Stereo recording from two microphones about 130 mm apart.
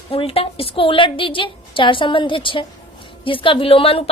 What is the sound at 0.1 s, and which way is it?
Speech, 45° left (ahead or behind).